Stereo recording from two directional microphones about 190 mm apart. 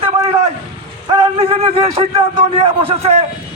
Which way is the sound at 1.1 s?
25° right (ahead or behind).